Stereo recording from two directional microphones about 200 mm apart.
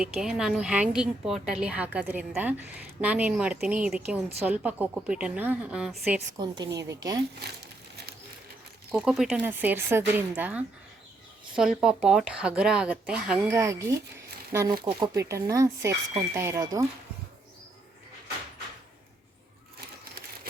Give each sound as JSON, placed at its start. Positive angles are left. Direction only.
{"t": 0.0, "sound": "a woman's voice", "side_deg": -5}
{"t": 6.3, "sound": "a woman's voice", "side_deg": -20}
{"t": 8.9, "sound": "a woman's voice", "side_deg": -5}